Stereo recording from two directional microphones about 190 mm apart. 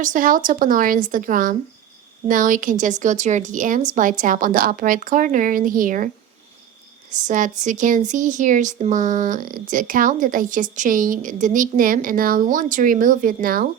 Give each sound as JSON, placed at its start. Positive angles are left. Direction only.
{"t": 0.0, "sound": "speech", "side_deg": -45}
{"t": 7.1, "sound": "speech", "side_deg": -40}